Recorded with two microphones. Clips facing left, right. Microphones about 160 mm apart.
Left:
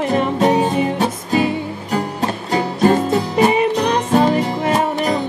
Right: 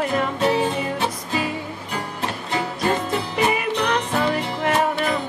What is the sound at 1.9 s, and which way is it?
Music, 40° left (ahead or behind).